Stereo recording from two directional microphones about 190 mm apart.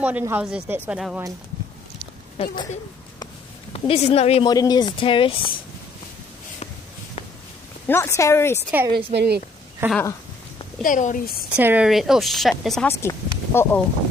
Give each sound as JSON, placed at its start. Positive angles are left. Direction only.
{"t": 0.0, "sound": "speech", "side_deg": -10}
{"t": 2.3, "sound": "speech", "side_deg": 25}
{"t": 3.7, "sound": "speech", "side_deg": 30}
{"t": 4.5, "sound": "speech", "side_deg": 20}
{"t": 7.9, "sound": "speech", "side_deg": 15}
{"t": 8.9, "sound": "a woman's voice", "side_deg": -60}
{"t": 9.8, "sound": "speech", "side_deg": -10}
{"t": 10.8, "sound": "a woman's voice", "side_deg": 45}
{"t": 11.5, "sound": "a woman's voice", "side_deg": -10}
{"t": 13.0, "sound": "a sound", "side_deg": 10}